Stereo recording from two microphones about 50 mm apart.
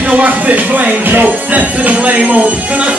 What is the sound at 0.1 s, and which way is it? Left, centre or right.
Speech, right.